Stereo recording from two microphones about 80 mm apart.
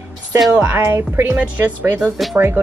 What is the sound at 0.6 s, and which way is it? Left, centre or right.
Speech, right.